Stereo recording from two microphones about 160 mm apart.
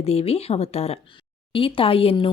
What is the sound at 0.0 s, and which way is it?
Speech, 40° left (ahead or behind).